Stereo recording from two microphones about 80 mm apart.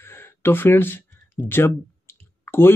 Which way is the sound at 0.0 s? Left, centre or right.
Left.